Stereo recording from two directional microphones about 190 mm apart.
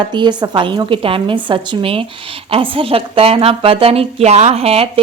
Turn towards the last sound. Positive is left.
turn(degrees=-30)  # may be behind; listen again after turning